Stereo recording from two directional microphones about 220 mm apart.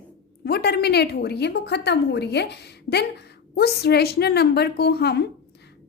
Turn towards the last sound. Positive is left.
turn(degrees=50)  # may be behind; listen again after turning